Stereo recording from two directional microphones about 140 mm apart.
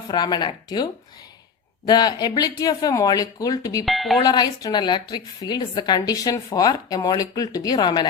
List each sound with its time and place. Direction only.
0.1 s speech: 30° left (ahead or behind)
1.9 s a woman's voice: 30° left (ahead or behind)
3.8 s speech: centre (ahead or behind)
4.2 s a woman's voice: 30° left (ahead or behind)